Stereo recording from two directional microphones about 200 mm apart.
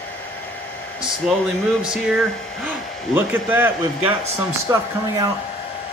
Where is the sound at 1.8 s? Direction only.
Centre (ahead or behind).